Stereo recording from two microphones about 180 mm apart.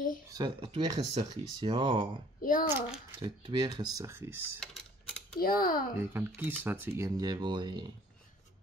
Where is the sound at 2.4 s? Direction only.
50° left (ahead or behind).